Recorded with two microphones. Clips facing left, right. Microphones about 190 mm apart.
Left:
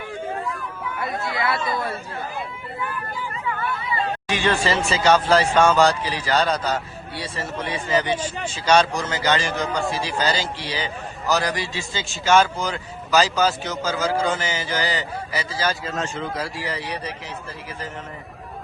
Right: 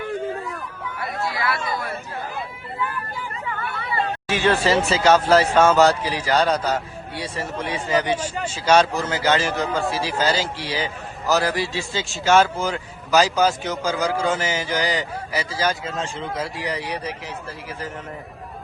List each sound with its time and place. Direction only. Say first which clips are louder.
1.0 s speech: even; 20° left (ahead or behind)
4.3 s a man's voice: right 3 dB; 5° right (ahead or behind)
16.0 s a man's voice: even; 25° right (ahead or behind); by 17.2 s 10° right (ahead or behind)